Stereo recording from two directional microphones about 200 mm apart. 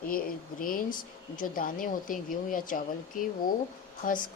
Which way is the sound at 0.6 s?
45° left (ahead or behind).